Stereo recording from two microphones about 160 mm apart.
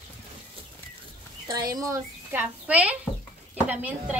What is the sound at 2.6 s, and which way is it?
A woman's voice, 10° right (ahead or behind).